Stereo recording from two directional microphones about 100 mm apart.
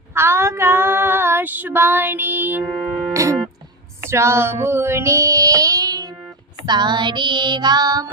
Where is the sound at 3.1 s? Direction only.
30° right (ahead or behind).